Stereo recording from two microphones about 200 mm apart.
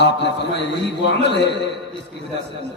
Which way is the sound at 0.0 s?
60° left (ahead or behind).